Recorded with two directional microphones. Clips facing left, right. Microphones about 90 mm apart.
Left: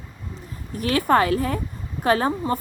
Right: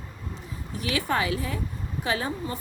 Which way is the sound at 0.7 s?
50° left (ahead or behind).